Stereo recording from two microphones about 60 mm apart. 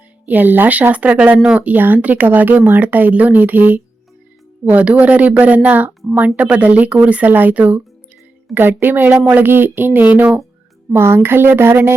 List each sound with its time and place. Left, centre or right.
0.3 s speech: right
1.4 s speech: centre
1.6 s speech: right
8.5 s speech: right
9.4 s speech: right
10.9 s speech: right